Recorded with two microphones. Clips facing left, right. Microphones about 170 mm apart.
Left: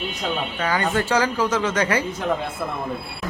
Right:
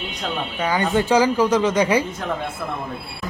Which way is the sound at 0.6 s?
15° right (ahead or behind).